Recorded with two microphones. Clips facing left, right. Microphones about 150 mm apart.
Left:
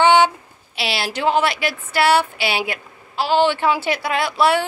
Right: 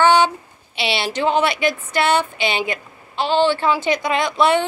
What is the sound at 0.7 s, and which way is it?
Speech, centre (ahead or behind).